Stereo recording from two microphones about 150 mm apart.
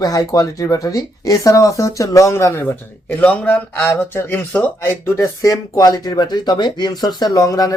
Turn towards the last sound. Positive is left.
turn(degrees=20)  # may be behind; listen again after turning